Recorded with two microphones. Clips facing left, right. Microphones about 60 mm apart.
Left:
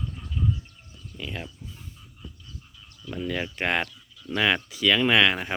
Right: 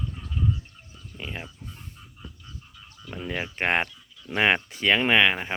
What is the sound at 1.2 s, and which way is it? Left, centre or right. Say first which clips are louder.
Speech: left 1 dB; right.